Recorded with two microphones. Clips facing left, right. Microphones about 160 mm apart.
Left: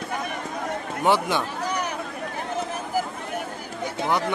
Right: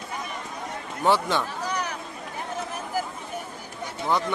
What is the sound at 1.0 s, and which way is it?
Speech, 15° left (ahead or behind).